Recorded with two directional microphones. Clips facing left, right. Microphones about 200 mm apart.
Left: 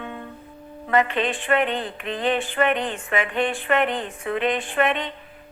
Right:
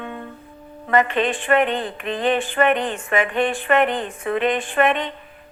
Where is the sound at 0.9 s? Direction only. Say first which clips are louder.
Right 2 dB; 50° right (ahead or behind).